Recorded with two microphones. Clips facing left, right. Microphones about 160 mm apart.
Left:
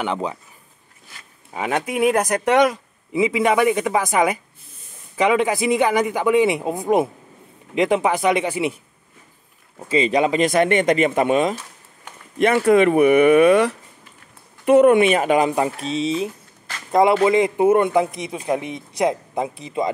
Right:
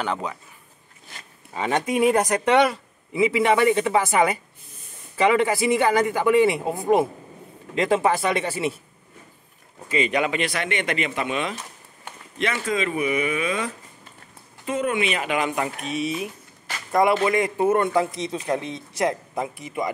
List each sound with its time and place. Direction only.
1.5 s a man's voice: 10° left (ahead or behind)
9.8 s speech: 30° left (ahead or behind)
12.4 s a man's voice: 55° left (ahead or behind); by 19.9 s 20° left (ahead or behind)